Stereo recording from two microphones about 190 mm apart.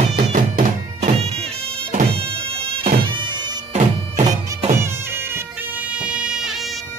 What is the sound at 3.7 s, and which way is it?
Bagpipes, 40° right (ahead or behind).